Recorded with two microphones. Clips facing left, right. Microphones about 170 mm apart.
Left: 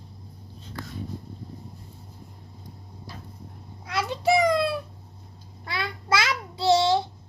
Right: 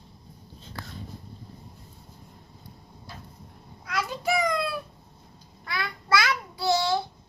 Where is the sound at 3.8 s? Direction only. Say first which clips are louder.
Left 4 dB; 25° left (ahead or behind).